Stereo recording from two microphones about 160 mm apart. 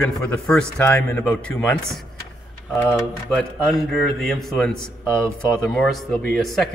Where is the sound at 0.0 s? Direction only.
5° left (ahead or behind).